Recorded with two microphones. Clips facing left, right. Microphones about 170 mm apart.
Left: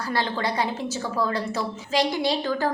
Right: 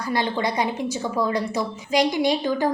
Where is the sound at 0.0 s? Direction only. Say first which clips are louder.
Right 2 dB; 15° right (ahead or behind).